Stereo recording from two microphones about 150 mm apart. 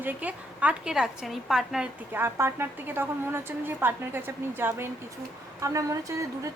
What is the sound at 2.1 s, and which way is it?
A woman's voice, 15° right (ahead or behind).